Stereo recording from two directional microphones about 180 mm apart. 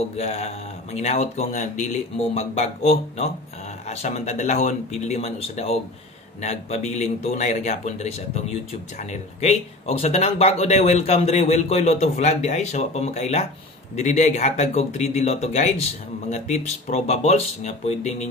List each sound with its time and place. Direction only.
0.2 s speech: 35° left (ahead or behind)